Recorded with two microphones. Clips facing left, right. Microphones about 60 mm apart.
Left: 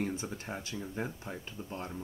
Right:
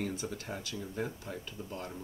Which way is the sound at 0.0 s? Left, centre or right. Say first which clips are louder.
Left 1 dB; left.